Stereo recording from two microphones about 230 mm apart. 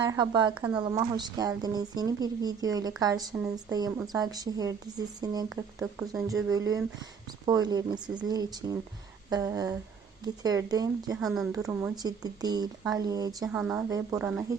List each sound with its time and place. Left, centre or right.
0.0 s a woman's voice: centre
11.2 s speech: centre
11.5 s speech: centre
13.5 s speech: centre